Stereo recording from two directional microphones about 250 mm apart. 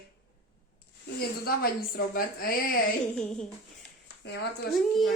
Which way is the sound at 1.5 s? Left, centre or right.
Left.